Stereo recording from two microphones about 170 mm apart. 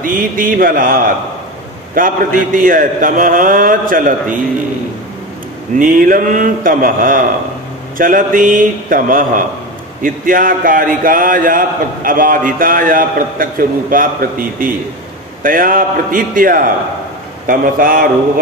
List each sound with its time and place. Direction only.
0.0 s a man's voice: 55° right (ahead or behind)
5.8 s a man's voice: 55° right (ahead or behind)